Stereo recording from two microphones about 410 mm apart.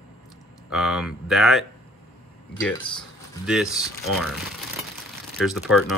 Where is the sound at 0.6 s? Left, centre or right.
Centre.